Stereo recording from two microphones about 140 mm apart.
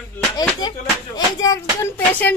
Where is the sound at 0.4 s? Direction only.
30° left (ahead or behind).